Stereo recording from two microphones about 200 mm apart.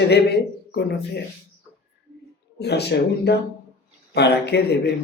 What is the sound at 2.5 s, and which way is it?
Speech, 55° left (ahead or behind).